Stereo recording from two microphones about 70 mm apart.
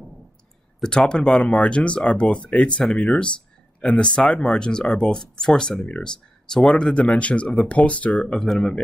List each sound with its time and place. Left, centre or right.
0.8 s speech: centre